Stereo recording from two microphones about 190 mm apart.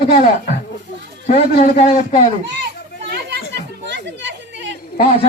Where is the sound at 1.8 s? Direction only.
35° left (ahead or behind).